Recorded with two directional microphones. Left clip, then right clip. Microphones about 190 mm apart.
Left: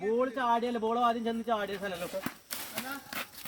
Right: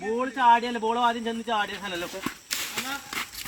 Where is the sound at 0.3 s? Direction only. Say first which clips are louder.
Right 9 dB; 60° left (ahead or behind).